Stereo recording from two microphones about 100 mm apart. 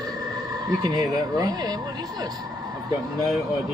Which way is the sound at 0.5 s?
40° right (ahead or behind).